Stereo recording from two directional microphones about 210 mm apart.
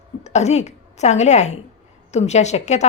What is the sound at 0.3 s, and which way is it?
A woman's voice, 30° left (ahead or behind).